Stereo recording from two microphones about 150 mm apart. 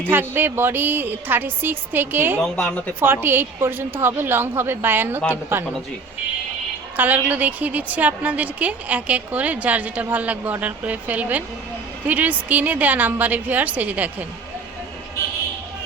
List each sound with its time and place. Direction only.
0.1 s a woman's voice: 15° right (ahead or behind)
2.4 s speech: 5° left (ahead or behind)
3.0 s a woman's voice: 15° right (ahead or behind)
6.9 s a woman's voice: 10° right (ahead or behind)